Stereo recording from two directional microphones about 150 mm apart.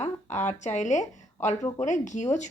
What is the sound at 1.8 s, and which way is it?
Speech, 55° left (ahead or behind).